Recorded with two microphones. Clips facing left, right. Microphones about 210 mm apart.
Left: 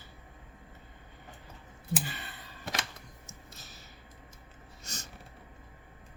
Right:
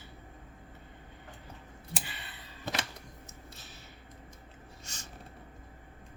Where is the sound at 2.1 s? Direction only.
45° left (ahead or behind).